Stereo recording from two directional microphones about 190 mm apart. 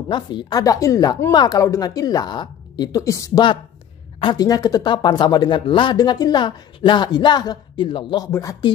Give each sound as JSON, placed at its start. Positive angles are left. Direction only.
{"t": 0.1, "sound": "speech", "side_deg": 25}